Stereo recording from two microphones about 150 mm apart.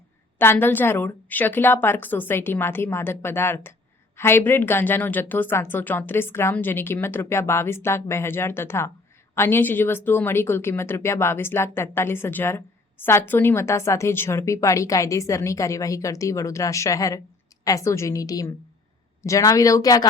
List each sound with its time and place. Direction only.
0.3 s a woman's voice: 15° left (ahead or behind)